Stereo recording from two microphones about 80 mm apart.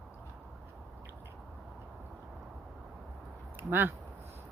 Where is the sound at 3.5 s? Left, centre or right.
Right.